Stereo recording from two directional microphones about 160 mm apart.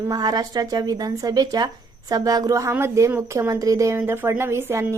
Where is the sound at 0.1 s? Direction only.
25° right (ahead or behind).